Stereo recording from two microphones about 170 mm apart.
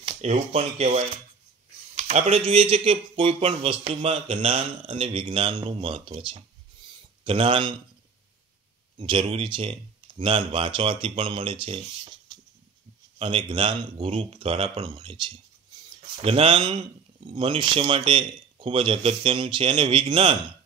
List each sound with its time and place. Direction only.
0.2 s speech: 40° right (ahead or behind)
8.9 s a man's voice: 30° right (ahead or behind)